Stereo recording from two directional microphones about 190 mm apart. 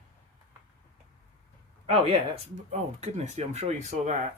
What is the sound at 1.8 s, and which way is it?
Speech, 30° right (ahead or behind).